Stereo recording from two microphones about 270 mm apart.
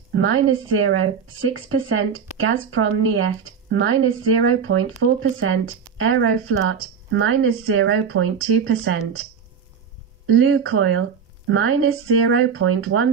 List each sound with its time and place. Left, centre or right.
0.1 s a woman's voice: right
10.2 s a woman's voice: right